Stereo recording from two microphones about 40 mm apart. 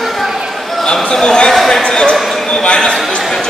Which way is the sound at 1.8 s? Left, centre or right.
Centre.